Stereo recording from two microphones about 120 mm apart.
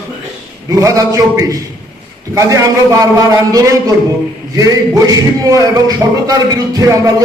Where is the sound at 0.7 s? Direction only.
30° right (ahead or behind).